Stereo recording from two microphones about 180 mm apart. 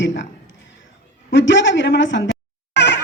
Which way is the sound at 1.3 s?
90° left.